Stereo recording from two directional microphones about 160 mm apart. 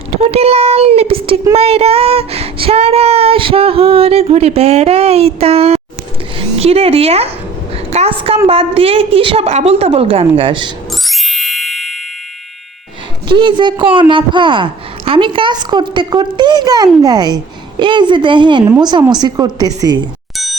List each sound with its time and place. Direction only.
0.3 s a woman's voice: 40° right (ahead or behind)
1.5 s child singing: 40° right (ahead or behind)
6.3 s a woman's voice: 40° right (ahead or behind)
11.0 s music: centre (ahead or behind)
13.2 s speech: 30° right (ahead or behind)
20.3 s music: centre (ahead or behind)